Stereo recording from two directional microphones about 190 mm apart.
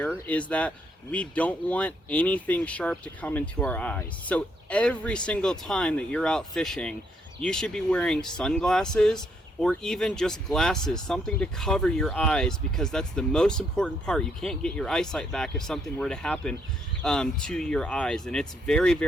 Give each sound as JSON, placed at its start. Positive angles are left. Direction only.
{"t": 0.0, "sound": "speech", "side_deg": 5}